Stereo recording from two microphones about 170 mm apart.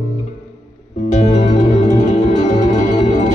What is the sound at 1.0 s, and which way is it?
Music, 50° left (ahead or behind).